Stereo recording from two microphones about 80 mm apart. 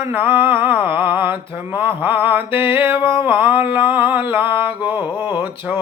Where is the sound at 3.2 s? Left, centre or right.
Right.